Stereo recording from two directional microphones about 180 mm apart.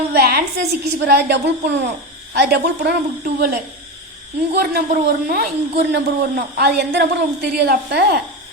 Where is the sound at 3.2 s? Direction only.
50° right (ahead or behind).